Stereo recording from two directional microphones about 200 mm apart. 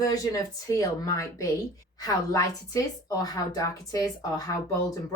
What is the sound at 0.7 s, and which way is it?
Speech, 15° left (ahead or behind).